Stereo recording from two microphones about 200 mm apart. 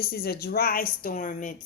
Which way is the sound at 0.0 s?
50° left (ahead or behind).